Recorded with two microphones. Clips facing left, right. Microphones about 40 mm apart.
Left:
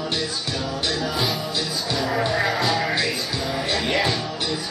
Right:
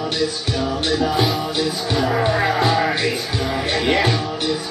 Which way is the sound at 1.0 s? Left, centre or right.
Right.